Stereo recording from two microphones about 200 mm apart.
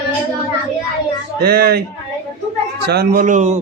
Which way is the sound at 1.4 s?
50° right (ahead or behind).